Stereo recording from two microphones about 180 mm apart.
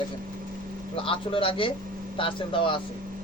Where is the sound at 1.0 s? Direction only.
30° left (ahead or behind).